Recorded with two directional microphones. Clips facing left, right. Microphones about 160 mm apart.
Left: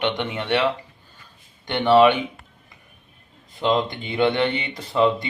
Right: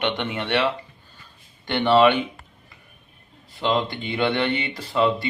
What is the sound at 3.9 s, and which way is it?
Speech, 20° left (ahead or behind).